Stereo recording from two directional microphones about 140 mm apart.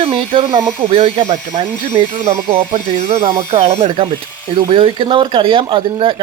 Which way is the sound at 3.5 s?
50° right (ahead or behind).